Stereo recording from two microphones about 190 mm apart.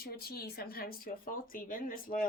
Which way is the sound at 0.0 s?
55° left (ahead or behind).